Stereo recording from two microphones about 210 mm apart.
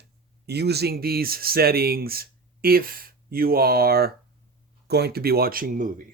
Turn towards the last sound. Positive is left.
turn(degrees=-40)  # may be behind; listen again after turning